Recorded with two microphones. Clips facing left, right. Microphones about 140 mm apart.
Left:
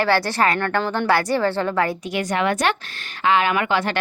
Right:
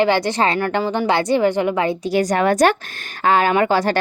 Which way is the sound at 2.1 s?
40° right (ahead or behind).